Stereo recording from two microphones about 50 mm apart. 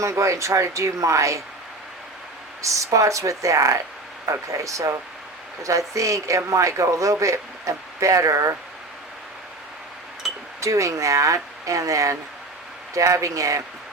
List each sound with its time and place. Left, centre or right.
0.0 s speech: right
2.6 s speech: right
10.6 s speech: right